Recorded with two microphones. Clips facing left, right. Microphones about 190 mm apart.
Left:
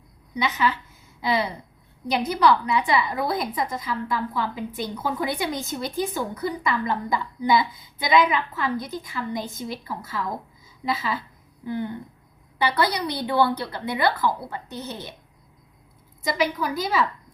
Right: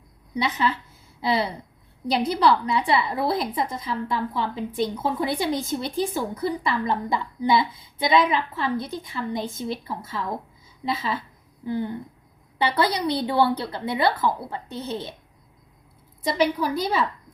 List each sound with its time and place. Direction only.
0.3 s a woman's voice: 30° right (ahead or behind)
12.5 s a woman's voice: 25° right (ahead or behind)
16.2 s a woman's voice: 30° right (ahead or behind)